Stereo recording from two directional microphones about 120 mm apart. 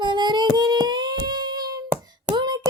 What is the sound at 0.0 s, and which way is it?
Child singing, 40° right (ahead or behind).